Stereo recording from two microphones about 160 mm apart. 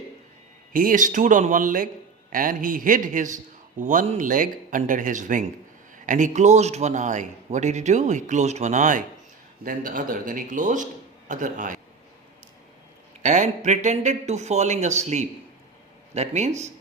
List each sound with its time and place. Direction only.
0.7 s a man's voice: 60° right (ahead or behind)
13.2 s a man's voice: 50° right (ahead or behind)